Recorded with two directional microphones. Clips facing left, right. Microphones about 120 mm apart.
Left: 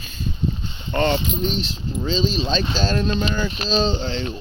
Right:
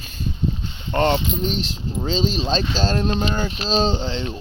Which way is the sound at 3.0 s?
50° right (ahead or behind).